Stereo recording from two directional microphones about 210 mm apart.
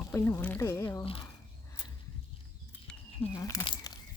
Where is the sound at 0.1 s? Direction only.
10° left (ahead or behind).